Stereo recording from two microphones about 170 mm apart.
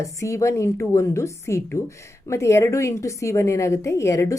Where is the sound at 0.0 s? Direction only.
20° left (ahead or behind).